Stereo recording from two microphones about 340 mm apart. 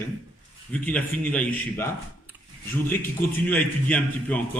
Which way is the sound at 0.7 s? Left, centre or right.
Centre.